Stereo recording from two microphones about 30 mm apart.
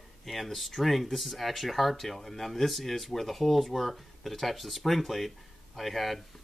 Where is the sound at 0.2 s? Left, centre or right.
Centre.